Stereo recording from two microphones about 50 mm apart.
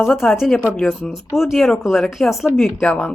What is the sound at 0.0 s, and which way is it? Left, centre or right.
A woman's voice, centre.